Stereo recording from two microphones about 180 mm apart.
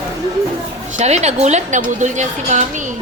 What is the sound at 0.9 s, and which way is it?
A woman's voice, 40° right (ahead or behind).